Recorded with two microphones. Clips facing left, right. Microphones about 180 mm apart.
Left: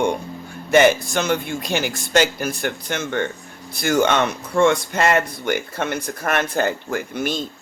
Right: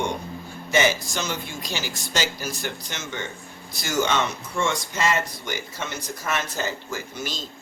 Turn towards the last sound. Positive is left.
turn(degrees=60)  # may be behind; listen again after turning